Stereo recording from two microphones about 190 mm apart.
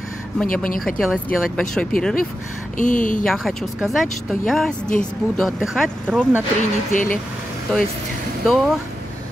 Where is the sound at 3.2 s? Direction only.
Centre (ahead or behind).